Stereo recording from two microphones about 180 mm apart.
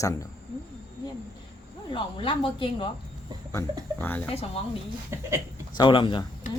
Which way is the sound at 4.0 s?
10° left (ahead or behind).